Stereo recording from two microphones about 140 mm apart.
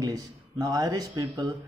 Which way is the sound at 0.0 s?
30° right (ahead or behind).